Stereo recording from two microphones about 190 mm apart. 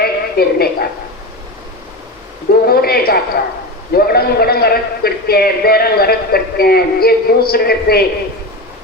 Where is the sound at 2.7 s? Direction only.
55° left (ahead or behind).